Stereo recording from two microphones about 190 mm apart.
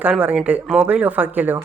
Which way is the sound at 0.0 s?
10° right (ahead or behind).